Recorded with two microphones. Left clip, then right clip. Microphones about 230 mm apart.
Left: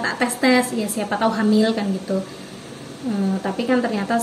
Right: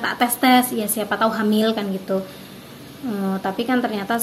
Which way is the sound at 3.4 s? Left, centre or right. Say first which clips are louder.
Left 1 dB; right.